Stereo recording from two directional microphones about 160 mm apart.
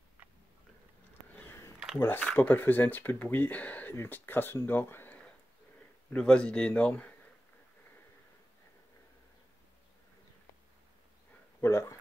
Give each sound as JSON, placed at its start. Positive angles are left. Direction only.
{"t": 1.3, "sound": "a sound", "side_deg": 15}
{"t": 2.0, "sound": "speech", "side_deg": 10}
{"t": 11.6, "sound": "dog", "side_deg": 15}